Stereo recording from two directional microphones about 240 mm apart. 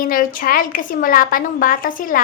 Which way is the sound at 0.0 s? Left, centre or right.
Left.